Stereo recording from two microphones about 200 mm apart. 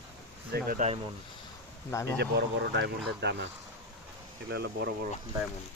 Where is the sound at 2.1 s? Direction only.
55° right (ahead or behind).